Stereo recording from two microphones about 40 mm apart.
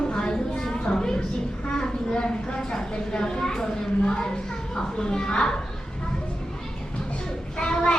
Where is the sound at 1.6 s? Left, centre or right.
Centre.